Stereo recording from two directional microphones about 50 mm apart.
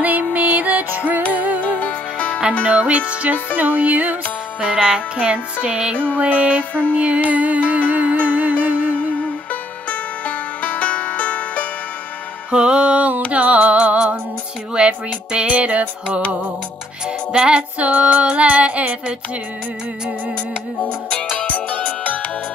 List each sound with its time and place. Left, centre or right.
0.0 s music: right
1.6 s music: left
2.6 s female singing: right
3.5 s music: right
4.6 s female singing: centre
7.9 s music: right
8.9 s music: left
12.4 s music: centre
13.3 s female singing: right
17.3 s female singing: centre
20.8 s music: left